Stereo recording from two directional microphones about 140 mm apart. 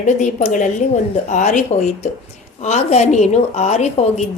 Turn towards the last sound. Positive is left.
turn(degrees=50)  # may be behind; listen again after turning